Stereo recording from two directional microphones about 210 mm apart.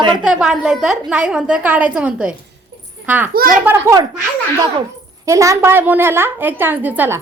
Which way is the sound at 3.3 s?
45° right (ahead or behind).